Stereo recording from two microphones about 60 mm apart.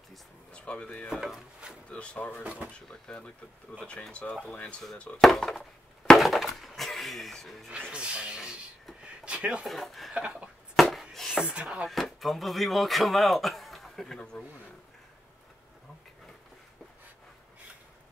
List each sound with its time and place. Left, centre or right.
0.5 s speech: centre
1.1 s speech: centre
1.9 s speech: left
2.4 s speech: right
3.1 s speech: centre
4.1 s speech: left
5.2 s wood: centre
7.9 s speech: centre
9.0 s a sound: centre
9.7 s speech: centre
10.1 s a sound: centre
10.8 s chopping: centre
11.5 s speech: centre
11.9 s speech: centre